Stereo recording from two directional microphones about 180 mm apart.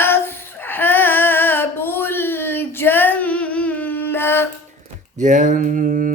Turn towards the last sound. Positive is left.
turn(degrees=-45)  # may be behind; listen again after turning